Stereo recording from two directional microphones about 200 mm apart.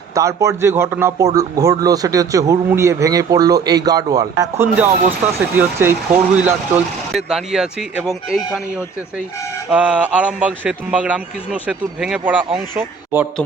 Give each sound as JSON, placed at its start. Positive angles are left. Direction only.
{"t": 0.1, "sound": "speech", "side_deg": -15}
{"t": 9.7, "sound": "speech", "side_deg": -5}